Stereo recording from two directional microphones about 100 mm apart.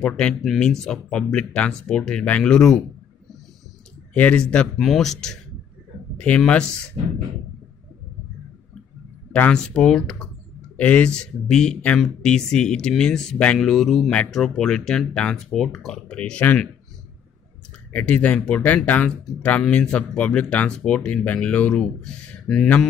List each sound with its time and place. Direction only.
0.0 s speech: 10° left (ahead or behind)
4.1 s speech: 15° left (ahead or behind)
7.0 s a sound: 60° right (ahead or behind)
9.3 s speech: 10° left (ahead or behind)
17.9 s speech: 15° left (ahead or behind)